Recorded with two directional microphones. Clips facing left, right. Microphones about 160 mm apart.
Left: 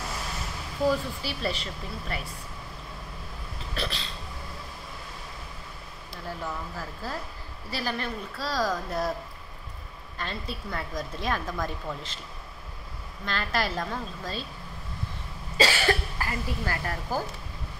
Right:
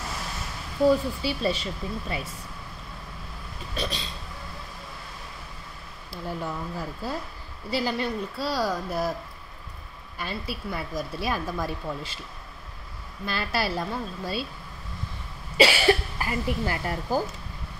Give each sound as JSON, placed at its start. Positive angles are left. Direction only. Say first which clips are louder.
{"t": 1.2, "sound": "a woman's voice", "louder": "right 5 dB", "side_deg": -15}
{"t": 3.7, "sound": "a woman's voice", "louder": "right 2 dB", "side_deg": -15}
{"t": 6.2, "sound": "a woman's voice", "louder": "right 3 dB", "side_deg": -15}
{"t": 10.1, "sound": "a woman's voice", "louder": "right 2 dB", "side_deg": -10}
{"t": 13.2, "sound": "a woman's voice", "louder": "right 1 dB", "side_deg": -10}
{"t": 15.5, "sound": "a woman's voice", "louder": "right 4 dB", "side_deg": -15}